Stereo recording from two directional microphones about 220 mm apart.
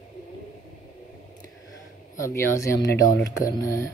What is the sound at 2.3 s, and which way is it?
Speech, 15° left (ahead or behind).